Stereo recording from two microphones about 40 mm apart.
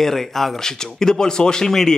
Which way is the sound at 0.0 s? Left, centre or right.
Centre.